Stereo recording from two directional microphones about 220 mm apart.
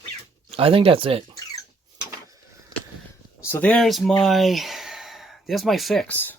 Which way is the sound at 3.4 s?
10° left (ahead or behind).